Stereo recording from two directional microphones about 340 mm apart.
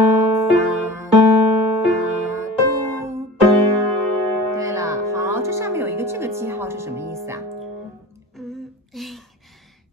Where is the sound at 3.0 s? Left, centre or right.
Centre.